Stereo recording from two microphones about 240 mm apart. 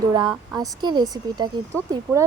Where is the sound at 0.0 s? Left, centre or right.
Centre.